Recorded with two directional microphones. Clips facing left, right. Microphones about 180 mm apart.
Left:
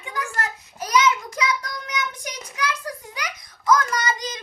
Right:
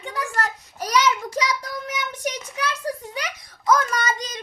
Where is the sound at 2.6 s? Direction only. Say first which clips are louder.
Right 1 dB; 30° right (ahead or behind).